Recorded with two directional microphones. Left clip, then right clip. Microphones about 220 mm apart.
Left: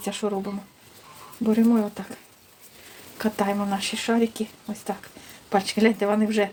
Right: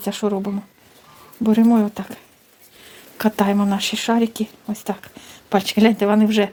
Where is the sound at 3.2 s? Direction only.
45° right (ahead or behind).